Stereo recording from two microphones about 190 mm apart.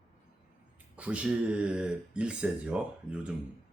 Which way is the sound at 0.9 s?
5° right (ahead or behind).